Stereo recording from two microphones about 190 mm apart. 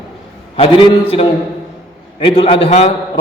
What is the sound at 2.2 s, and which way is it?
Speech, 30° left (ahead or behind).